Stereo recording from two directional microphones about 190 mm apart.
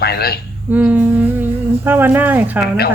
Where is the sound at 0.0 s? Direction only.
55° left (ahead or behind).